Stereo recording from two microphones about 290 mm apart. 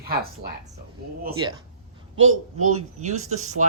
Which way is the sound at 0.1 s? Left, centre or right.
Right.